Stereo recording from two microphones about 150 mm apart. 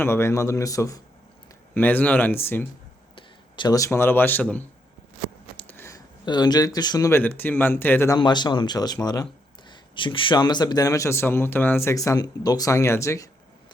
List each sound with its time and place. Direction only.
0.0 s speech: 15° left (ahead or behind)
1.7 s speech: 10° left (ahead or behind)
3.2 s speech: 30° left (ahead or behind); by 4.6 s 10° left (ahead or behind)
5.5 s a sound: 15° left (ahead or behind)
6.2 s speech: 30° left (ahead or behind)
7.2 s speech: 15° left (ahead or behind)
8.2 s speech: 30° left (ahead or behind)